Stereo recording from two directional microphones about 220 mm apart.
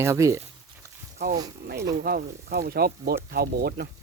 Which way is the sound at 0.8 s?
15° right (ahead or behind).